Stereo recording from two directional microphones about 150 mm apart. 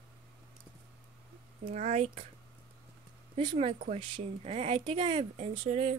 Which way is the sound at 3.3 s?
35° right (ahead or behind).